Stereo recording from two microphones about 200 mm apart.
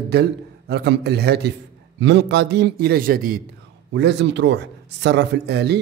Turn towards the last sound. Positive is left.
turn(degrees=-55)  # may be behind; listen again after turning